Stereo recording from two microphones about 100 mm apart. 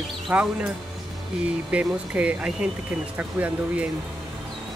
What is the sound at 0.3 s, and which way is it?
Speech, 15° right (ahead or behind).